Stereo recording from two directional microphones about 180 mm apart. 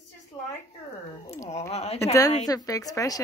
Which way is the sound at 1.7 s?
35° left (ahead or behind).